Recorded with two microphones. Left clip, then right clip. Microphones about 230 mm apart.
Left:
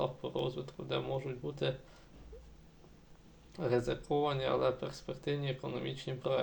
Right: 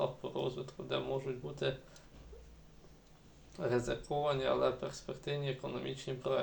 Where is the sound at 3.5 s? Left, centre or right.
Left.